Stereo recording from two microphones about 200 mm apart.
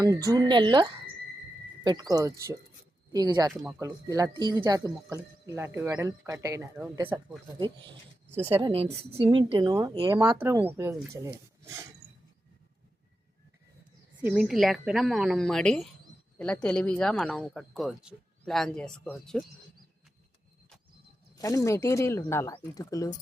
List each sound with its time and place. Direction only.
0.0 s speech: 15° right (ahead or behind)
3.5 s speech: centre (ahead or behind)
3.8 s speech: 15° right (ahead or behind)
8.6 s speech: 30° right (ahead or behind)
14.2 s speech: 5° right (ahead or behind)
21.3 s speech: 15° left (ahead or behind)